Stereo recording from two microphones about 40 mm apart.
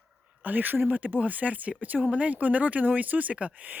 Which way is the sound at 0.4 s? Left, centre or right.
Right.